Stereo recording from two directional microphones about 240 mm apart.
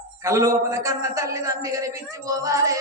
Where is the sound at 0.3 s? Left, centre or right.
Centre.